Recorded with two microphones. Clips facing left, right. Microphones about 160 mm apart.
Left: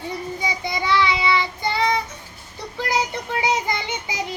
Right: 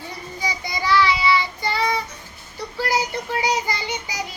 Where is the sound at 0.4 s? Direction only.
25° left (ahead or behind).